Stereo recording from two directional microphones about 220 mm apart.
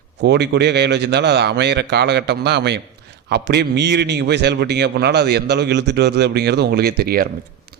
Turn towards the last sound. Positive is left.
turn(degrees=-45)  # may be behind; listen again after turning